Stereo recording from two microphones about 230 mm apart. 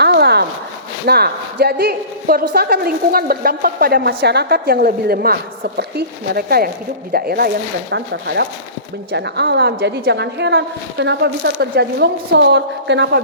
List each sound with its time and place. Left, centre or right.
0.0 s zipper: right
1.0 s a woman's voice: right